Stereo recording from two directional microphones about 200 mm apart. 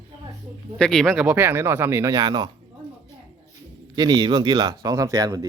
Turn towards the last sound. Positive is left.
turn(degrees=-15)  # may be behind; listen again after turning